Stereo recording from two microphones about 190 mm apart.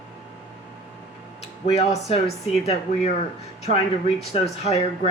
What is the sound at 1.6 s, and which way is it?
Speech, 35° left (ahead or behind).